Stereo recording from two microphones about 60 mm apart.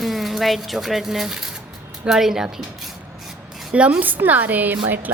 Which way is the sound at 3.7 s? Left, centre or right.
Centre.